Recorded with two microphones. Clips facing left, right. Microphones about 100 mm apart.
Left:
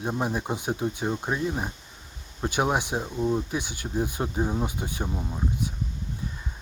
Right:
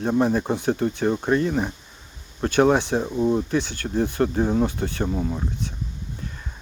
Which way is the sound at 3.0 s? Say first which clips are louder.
Right 5 dB; 15° right (ahead or behind).